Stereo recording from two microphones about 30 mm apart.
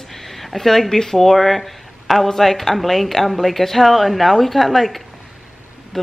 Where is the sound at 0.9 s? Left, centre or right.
Centre.